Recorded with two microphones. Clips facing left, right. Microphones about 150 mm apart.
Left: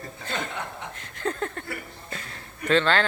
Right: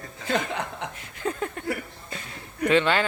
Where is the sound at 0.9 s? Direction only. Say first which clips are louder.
Left 1 dB; 10° right (ahead or behind).